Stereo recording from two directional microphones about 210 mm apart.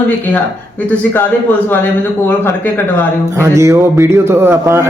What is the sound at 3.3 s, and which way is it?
A man's voice, 15° right (ahead or behind).